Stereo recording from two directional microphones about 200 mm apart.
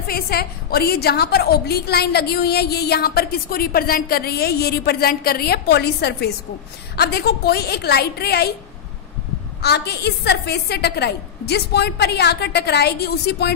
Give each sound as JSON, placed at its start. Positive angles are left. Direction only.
{"t": 0.0, "sound": "a woman's voice", "side_deg": 50}
{"t": 9.6, "sound": "a woman's voice", "side_deg": 55}